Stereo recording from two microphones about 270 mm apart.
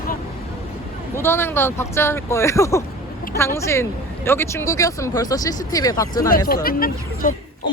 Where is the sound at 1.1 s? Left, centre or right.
Centre.